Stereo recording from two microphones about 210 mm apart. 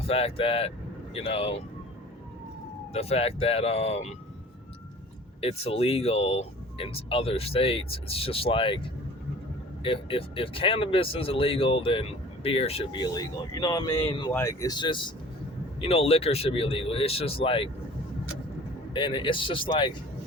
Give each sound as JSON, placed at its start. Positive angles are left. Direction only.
{"t": 0.0, "sound": "speech", "side_deg": 25}
{"t": 2.9, "sound": "speech", "side_deg": 30}
{"t": 5.4, "sound": "speech", "side_deg": 25}
{"t": 9.8, "sound": "speech", "side_deg": 25}
{"t": 18.9, "sound": "speech", "side_deg": 25}